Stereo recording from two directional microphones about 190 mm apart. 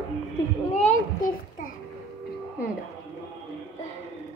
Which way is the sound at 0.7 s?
45° left (ahead or behind).